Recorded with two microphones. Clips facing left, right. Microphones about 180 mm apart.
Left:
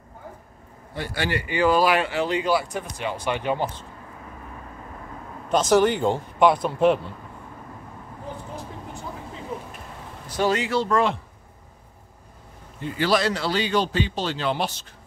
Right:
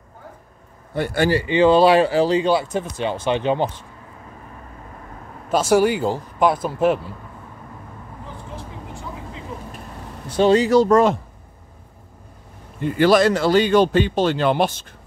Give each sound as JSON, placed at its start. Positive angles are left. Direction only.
{"t": 0.9, "sound": "speech", "side_deg": -50}
{"t": 1.3, "sound": "speech", "side_deg": -25}
{"t": 5.5, "sound": "speech", "side_deg": -10}
{"t": 10.3, "sound": "speech", "side_deg": -30}
{"t": 12.8, "sound": "speech", "side_deg": -55}